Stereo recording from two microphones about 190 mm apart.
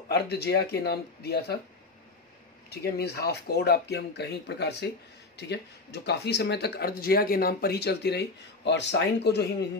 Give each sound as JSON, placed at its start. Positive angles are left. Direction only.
{"t": 0.1, "sound": "speech", "side_deg": 60}
{"t": 2.7, "sound": "speech", "side_deg": 55}